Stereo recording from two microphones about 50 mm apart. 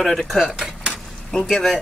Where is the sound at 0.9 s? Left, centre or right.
Centre.